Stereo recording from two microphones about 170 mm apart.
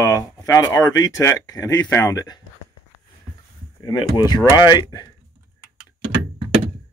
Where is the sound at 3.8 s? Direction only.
25° left (ahead or behind).